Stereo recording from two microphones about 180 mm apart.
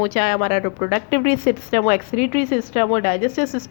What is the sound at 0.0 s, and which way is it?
A woman's voice, 55° left (ahead or behind).